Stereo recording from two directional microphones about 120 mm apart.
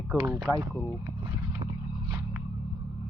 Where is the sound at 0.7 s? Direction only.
25° left (ahead or behind).